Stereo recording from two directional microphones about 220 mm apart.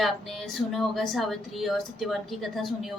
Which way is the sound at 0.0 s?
Centre (ahead or behind).